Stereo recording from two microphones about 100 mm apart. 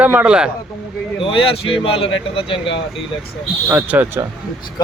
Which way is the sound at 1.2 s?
65° left (ahead or behind).